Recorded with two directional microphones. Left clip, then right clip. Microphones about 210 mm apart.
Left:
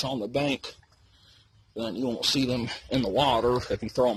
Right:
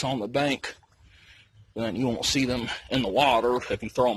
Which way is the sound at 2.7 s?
10° left (ahead or behind).